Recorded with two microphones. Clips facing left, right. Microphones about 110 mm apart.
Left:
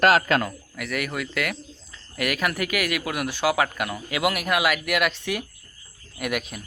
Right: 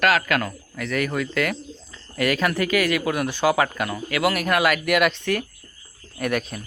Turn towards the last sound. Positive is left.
turn(degrees=5)  # may be behind; listen again after turning